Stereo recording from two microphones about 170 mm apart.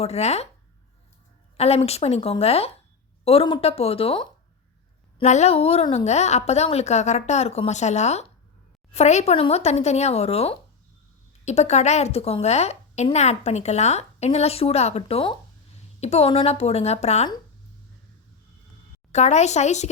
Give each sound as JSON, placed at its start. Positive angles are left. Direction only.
{"t": 0.0, "sound": "a woman's voice", "side_deg": 40}
{"t": 1.5, "sound": "a woman's voice", "side_deg": 40}
{"t": 19.1, "sound": "a woman's voice", "side_deg": 40}